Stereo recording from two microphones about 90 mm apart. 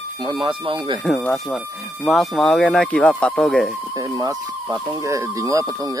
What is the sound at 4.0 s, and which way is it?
Speech, 40° right (ahead or behind).